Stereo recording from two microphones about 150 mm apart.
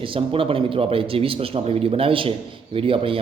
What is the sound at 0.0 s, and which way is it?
A man's voice, 35° right (ahead or behind).